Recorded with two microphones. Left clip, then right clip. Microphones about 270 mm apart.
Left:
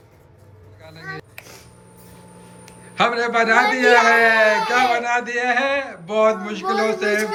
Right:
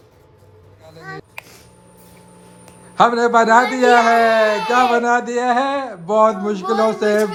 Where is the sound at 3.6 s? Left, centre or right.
Centre.